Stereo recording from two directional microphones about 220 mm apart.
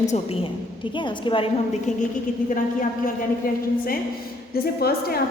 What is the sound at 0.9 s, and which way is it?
Speech, 20° left (ahead or behind).